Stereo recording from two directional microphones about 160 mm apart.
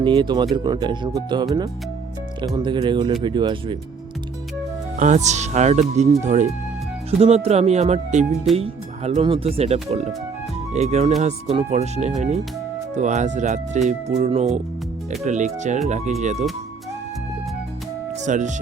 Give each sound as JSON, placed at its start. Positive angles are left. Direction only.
{"t": 0.0, "sound": "speech", "side_deg": -30}
{"t": 2.6, "sound": "speech", "side_deg": -30}
{"t": 4.9, "sound": "speech", "side_deg": -50}
{"t": 18.3, "sound": "speech", "side_deg": -50}